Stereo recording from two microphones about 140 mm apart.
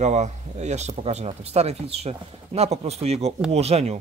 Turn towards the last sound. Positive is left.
turn(degrees=-50)  # may be behind; listen again after turning